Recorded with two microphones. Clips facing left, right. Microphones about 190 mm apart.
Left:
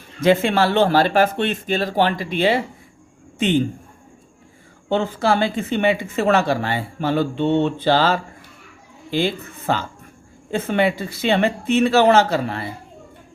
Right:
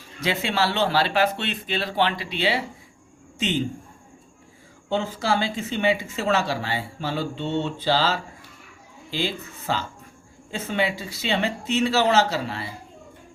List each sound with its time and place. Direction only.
0.2 s speech: 50° left (ahead or behind)
4.9 s speech: 60° left (ahead or behind)